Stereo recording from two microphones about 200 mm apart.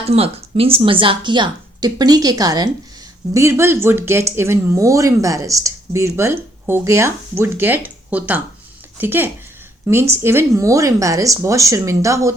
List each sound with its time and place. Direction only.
0.1 s a woman's voice: 30° right (ahead or behind)